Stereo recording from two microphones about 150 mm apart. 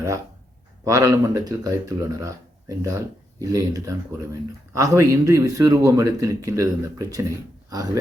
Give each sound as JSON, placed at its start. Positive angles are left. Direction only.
{"t": 0.9, "sound": "speech", "side_deg": -20}